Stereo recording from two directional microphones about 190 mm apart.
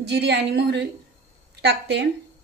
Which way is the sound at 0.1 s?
65° right (ahead or behind).